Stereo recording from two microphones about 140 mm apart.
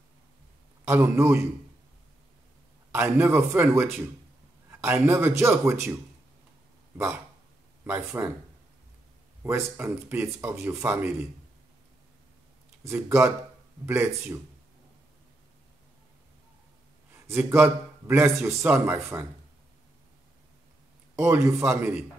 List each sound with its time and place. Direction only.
0.8 s a man's voice: 15° right (ahead or behind)
2.9 s a man's voice: 15° right (ahead or behind)
7.8 s a man's voice: 15° right (ahead or behind)
9.4 s a man's voice: 15° right (ahead or behind)
12.8 s a man's voice: 15° right (ahead or behind)
17.3 s a man's voice: 15° right (ahead or behind)
21.2 s a man's voice: 20° right (ahead or behind)